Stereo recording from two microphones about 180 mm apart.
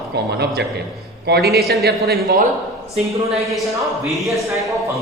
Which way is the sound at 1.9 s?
60° right (ahead or behind).